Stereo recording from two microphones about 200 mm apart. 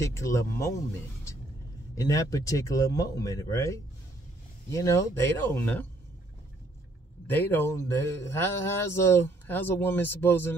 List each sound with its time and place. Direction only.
0.0 s a man's voice: 15° left (ahead or behind)
2.0 s a man's voice: 15° left (ahead or behind)
7.2 s a man's voice: 10° left (ahead or behind)